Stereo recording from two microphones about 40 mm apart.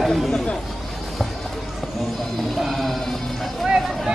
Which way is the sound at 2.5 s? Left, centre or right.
Centre.